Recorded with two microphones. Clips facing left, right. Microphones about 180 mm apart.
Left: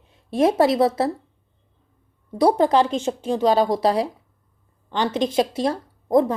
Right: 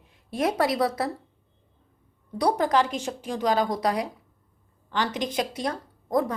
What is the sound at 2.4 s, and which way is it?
A woman's voice, 25° left (ahead or behind).